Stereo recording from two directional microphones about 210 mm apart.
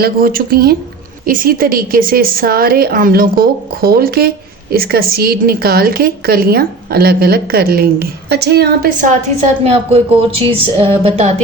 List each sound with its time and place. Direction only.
0.0 s a woman's voice: 45° right (ahead or behind)
9.6 s speech: 30° right (ahead or behind)